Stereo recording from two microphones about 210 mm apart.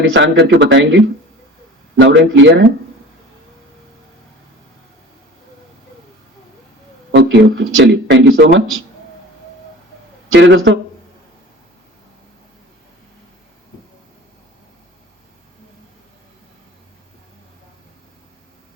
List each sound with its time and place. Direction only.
0.1 s speech: 60° right (ahead or behind)
7.1 s speech: 60° right (ahead or behind)
10.3 s speech: 55° right (ahead or behind)